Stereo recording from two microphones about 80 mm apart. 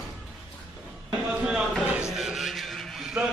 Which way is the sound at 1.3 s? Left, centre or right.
Centre.